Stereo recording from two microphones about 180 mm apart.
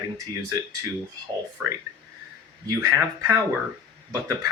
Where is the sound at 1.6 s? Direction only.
5° right (ahead or behind).